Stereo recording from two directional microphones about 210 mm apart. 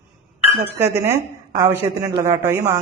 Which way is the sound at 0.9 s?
15° right (ahead or behind).